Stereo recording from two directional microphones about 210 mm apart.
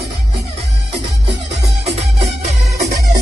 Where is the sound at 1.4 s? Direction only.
30° right (ahead or behind).